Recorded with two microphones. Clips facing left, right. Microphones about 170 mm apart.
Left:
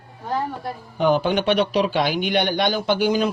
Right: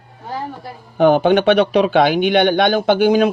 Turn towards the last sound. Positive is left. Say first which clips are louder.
# right 6 dB
turn(degrees=-60)  # may be behind; listen again after turning